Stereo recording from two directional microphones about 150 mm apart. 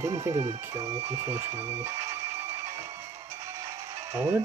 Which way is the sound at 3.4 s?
20° right (ahead or behind).